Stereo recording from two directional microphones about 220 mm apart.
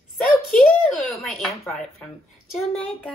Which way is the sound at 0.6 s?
5° left (ahead or behind).